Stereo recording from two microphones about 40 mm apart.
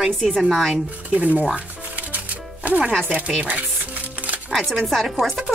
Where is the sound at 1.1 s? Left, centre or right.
Right.